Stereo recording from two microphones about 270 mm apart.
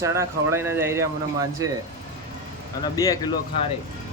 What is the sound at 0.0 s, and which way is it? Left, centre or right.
A man's voice, centre.